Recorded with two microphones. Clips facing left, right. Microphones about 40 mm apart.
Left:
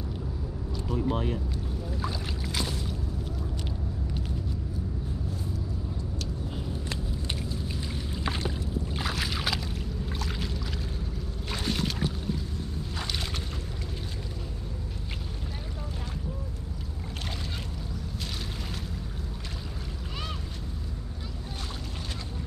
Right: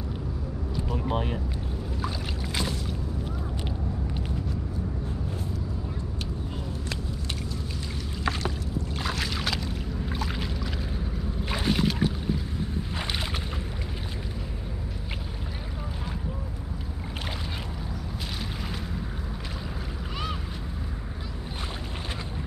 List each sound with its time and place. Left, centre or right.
0.7 s vehicle: centre
2.0 s boat: centre
8.2 s boat: centre
10.0 s a sound: centre
11.5 s boat: centre